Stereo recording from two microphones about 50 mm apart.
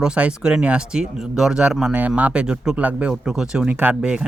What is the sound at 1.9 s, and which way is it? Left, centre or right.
Speech, right.